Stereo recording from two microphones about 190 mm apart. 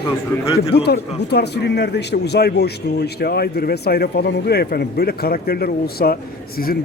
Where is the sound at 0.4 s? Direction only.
30° left (ahead or behind).